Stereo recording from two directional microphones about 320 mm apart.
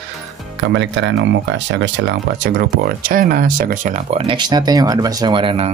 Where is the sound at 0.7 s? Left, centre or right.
Right.